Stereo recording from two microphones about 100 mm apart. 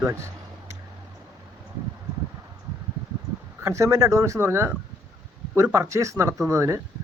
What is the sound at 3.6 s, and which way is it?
Speech, 30° right (ahead or behind).